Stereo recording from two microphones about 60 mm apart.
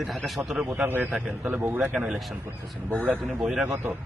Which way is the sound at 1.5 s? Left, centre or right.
Right.